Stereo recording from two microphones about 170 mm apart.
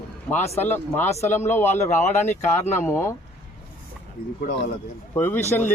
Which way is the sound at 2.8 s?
15° left (ahead or behind).